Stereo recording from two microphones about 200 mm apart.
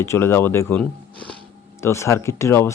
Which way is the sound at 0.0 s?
10° left (ahead or behind).